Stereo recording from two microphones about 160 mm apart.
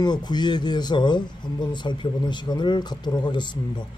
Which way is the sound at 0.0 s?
25° left (ahead or behind).